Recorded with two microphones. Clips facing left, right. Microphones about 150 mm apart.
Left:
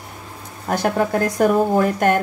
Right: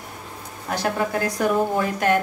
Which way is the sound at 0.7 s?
50° left (ahead or behind).